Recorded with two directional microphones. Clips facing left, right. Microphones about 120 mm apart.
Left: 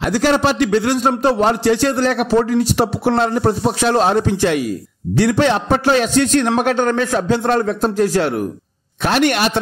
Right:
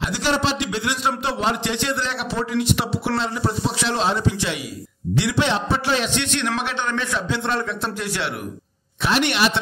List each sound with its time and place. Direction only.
0.0 s a man's voice: 50° left (ahead or behind)
3.2 s a man's voice: 50° left (ahead or behind)